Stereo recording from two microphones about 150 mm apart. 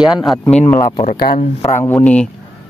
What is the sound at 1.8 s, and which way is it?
Speech, 15° left (ahead or behind).